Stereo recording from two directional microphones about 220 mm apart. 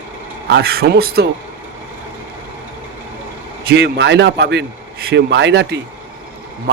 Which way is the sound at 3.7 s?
50° right (ahead or behind).